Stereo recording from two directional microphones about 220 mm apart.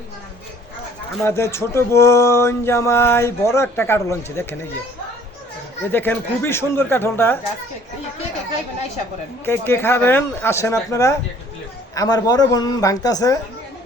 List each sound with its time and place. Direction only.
1.2 s speech: 10° left (ahead or behind)
5.9 s speech: 10° left (ahead or behind)
9.5 s speech: 10° left (ahead or behind)